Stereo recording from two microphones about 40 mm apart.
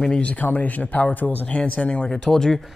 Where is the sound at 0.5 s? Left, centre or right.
Left.